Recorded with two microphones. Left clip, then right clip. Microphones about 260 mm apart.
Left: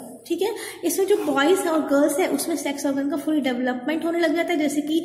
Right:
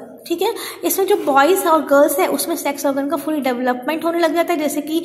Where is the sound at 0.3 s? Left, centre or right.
Centre.